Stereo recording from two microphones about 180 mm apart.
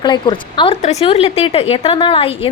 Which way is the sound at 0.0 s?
25° left (ahead or behind).